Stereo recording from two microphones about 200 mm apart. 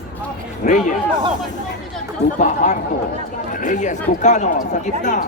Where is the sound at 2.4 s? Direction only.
35° left (ahead or behind).